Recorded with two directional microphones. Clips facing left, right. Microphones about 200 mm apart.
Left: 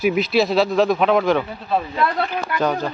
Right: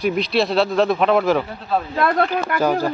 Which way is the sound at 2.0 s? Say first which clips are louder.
Right 3 dB; 60° right (ahead or behind).